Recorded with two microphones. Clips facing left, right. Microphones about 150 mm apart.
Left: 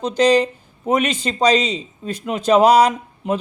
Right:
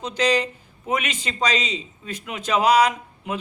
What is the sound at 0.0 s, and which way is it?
Speech, 35° left (ahead or behind).